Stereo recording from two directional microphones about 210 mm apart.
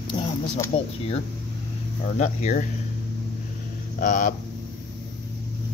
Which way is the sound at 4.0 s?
40° left (ahead or behind).